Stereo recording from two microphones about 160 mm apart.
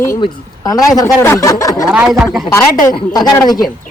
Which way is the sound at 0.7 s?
20° left (ahead or behind).